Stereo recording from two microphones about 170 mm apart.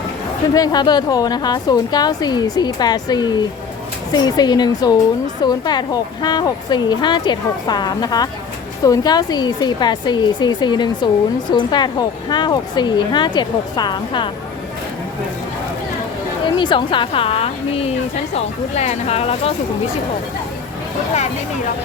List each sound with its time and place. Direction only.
0.5 s a woman's voice: 25° left (ahead or behind)
16.6 s a woman's voice: 30° left (ahead or behind)